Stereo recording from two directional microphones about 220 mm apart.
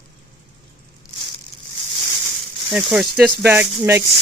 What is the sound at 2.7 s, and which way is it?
Speech, 5° right (ahead or behind).